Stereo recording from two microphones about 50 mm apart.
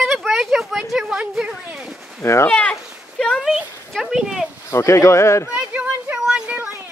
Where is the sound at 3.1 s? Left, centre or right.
Centre.